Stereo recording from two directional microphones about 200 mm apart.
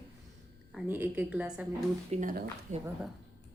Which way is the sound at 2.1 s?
40° right (ahead or behind).